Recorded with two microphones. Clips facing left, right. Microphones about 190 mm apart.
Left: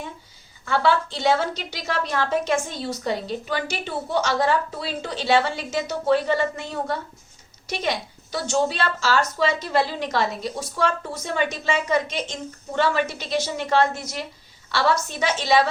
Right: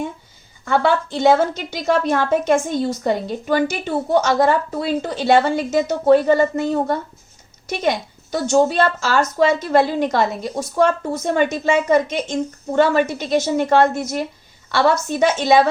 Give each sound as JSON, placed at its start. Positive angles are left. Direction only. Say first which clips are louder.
{"t": 0.6, "sound": "speech", "louder": "right 3 dB", "side_deg": -50}